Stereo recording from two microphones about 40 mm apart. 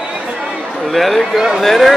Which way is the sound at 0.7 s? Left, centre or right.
Centre.